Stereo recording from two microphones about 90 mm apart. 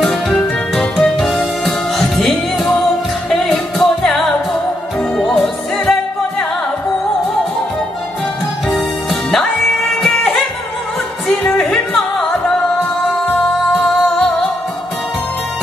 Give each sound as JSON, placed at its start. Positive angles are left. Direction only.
{"t": 0.0, "sound": "music", "side_deg": 0}
{"t": 8.6, "sound": "music", "side_deg": 5}
{"t": 11.4, "sound": "music", "side_deg": 15}
{"t": 11.9, "sound": "music", "side_deg": 5}
{"t": 13.7, "sound": "music", "side_deg": 5}